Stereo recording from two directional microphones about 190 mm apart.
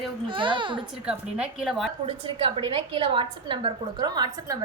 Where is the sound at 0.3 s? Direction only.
25° right (ahead or behind).